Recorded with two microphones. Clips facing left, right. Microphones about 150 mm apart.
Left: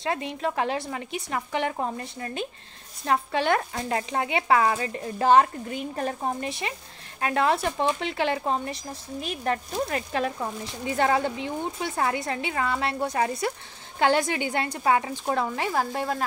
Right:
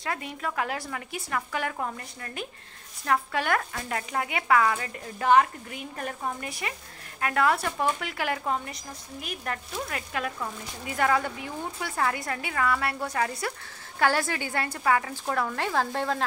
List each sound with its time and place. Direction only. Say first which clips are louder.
0.0 s speech: left 5 dB; 25° left (ahead or behind); by 16.3 s 10° left (ahead or behind)